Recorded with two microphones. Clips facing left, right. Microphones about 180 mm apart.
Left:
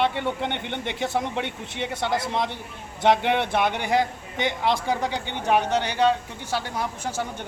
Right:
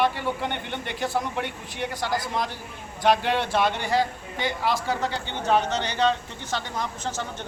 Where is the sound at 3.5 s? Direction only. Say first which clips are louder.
Left 1 dB; 15° left (ahead or behind).